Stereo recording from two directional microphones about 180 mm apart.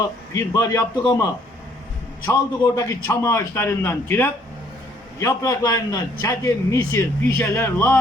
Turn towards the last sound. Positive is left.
turn(degrees=10)  # may be behind; listen again after turning